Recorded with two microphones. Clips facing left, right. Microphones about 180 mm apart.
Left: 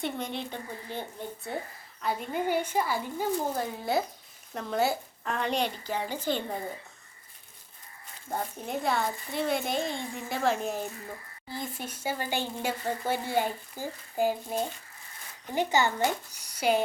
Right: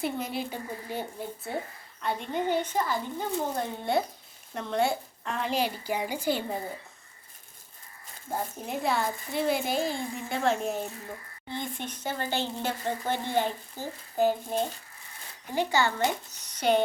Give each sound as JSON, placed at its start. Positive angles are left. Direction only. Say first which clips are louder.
{"t": 0.0, "sound": "speech", "louder": "right 2 dB", "side_deg": -5}
{"t": 2.0, "sound": "a child's voice", "louder": "even", "side_deg": 5}
{"t": 8.3, "sound": "a child's voice", "louder": "even", "side_deg": 0}